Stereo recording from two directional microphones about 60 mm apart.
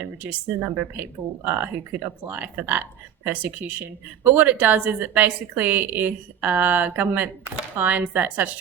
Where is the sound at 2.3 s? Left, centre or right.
Right.